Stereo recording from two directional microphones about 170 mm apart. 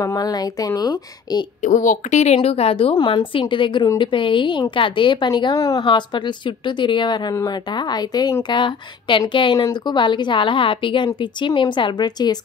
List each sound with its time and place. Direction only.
0.0 s a woman's voice: 20° left (ahead or behind)
1.6 s a woman's voice: 50° left (ahead or behind); by 12.4 s 25° left (ahead or behind)